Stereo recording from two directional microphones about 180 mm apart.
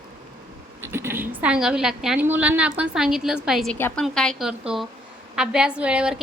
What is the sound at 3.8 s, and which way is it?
A woman's voice, 10° left (ahead or behind).